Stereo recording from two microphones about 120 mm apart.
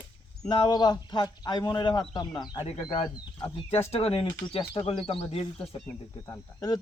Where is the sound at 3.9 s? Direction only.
55° left (ahead or behind).